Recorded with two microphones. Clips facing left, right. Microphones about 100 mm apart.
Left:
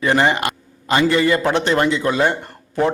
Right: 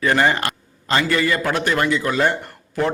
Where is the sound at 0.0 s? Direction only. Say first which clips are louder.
Left 1 dB; 20° left (ahead or behind).